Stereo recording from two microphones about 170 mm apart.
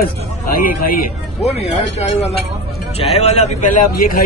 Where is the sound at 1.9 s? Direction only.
40° left (ahead or behind).